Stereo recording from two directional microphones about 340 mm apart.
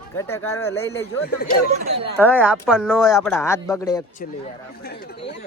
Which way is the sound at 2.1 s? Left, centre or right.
Centre.